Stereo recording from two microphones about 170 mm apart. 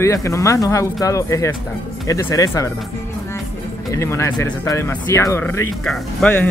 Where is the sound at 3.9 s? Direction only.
15° left (ahead or behind).